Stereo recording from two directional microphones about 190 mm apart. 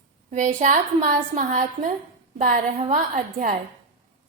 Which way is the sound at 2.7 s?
35° right (ahead or behind).